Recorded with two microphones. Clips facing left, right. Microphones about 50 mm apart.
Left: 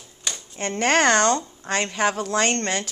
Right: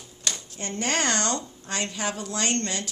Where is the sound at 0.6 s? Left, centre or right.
Left.